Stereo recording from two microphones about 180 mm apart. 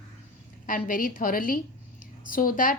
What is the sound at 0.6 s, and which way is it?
A woman's voice, 50° left (ahead or behind).